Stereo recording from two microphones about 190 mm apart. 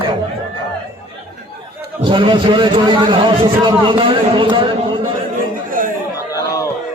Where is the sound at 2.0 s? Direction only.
25° right (ahead or behind).